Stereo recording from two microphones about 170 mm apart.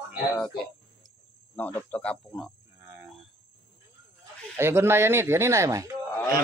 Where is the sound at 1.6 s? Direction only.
10° left (ahead or behind).